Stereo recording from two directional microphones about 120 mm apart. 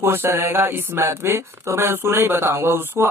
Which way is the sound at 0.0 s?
20° right (ahead or behind).